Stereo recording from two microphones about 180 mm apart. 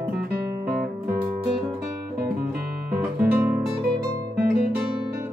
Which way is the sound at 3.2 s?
10° right (ahead or behind).